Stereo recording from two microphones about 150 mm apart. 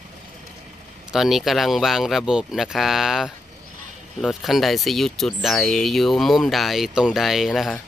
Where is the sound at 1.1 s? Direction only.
Centre (ahead or behind).